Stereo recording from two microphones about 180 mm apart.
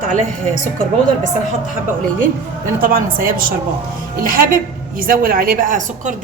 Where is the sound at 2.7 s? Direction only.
50° right (ahead or behind).